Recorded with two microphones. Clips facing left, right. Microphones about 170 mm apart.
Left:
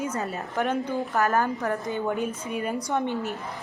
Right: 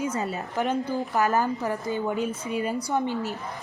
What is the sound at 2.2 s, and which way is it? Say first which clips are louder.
Speech: right 1 dB; 50° left (ahead or behind).